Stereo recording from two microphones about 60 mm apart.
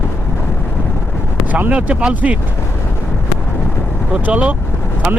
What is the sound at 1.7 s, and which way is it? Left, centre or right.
Speech, right.